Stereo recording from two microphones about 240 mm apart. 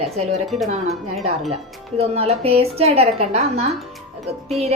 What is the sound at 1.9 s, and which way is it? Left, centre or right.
A woman's voice, right.